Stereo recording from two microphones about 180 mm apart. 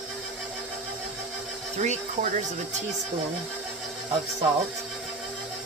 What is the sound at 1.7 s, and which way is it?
Speech, 40° right (ahead or behind).